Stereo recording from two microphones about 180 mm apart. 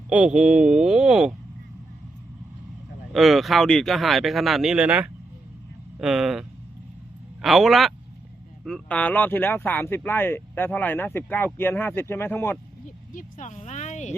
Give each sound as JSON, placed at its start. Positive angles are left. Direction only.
{"t": 0.1, "sound": "speech", "side_deg": -5}
{"t": 3.1, "sound": "speech", "side_deg": 0}
{"t": 7.4, "sound": "speech", "side_deg": 0}
{"t": 13.1, "sound": "a sound", "side_deg": 40}